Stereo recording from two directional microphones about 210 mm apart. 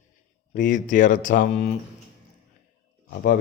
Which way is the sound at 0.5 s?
40° left (ahead or behind).